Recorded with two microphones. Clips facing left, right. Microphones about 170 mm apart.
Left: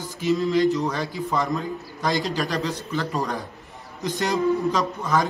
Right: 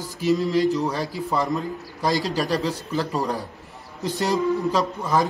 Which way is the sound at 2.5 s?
35° right (ahead or behind).